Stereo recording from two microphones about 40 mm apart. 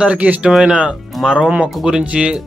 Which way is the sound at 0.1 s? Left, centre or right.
Right.